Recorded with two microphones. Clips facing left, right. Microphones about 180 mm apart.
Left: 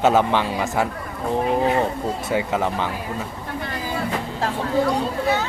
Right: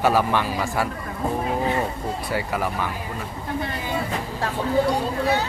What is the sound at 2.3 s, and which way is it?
Speech, 25° left (ahead or behind).